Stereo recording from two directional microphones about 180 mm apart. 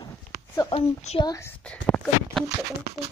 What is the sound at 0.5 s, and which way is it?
Speech, 30° left (ahead or behind).